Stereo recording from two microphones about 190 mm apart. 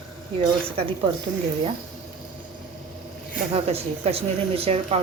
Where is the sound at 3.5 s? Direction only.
30° right (ahead or behind).